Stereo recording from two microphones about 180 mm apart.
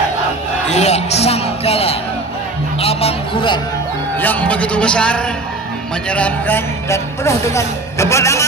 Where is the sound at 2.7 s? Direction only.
35° left (ahead or behind).